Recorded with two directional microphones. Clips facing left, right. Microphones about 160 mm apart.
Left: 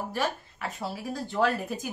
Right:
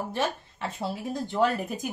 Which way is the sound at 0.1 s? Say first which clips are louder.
Right 1 dB; 25° right (ahead or behind).